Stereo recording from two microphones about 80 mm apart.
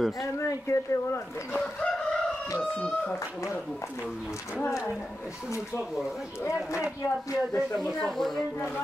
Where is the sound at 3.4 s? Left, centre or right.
Left.